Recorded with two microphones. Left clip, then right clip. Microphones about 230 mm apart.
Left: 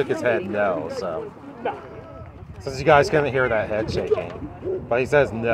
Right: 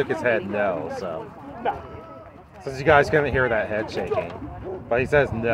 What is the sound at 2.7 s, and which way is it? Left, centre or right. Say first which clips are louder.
Speech: left 1 dB; centre.